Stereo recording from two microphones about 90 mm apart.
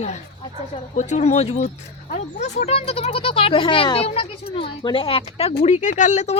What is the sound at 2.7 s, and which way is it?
Speech, 90° left.